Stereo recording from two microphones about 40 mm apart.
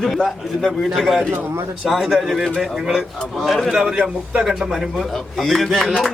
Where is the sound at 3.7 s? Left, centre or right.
Centre.